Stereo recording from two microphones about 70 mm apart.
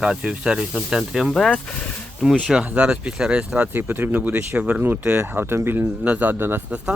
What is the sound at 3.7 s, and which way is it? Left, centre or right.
Speech, right.